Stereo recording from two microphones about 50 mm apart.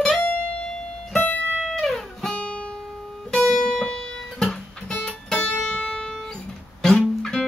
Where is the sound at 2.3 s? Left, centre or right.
Left.